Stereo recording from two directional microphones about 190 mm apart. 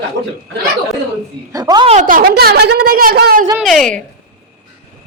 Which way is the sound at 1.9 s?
45° right (ahead or behind).